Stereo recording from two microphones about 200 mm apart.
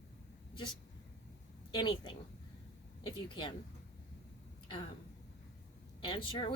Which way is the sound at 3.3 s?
25° left (ahead or behind).